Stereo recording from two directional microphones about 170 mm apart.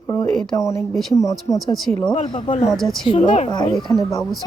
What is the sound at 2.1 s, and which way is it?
Speech, 30° left (ahead or behind).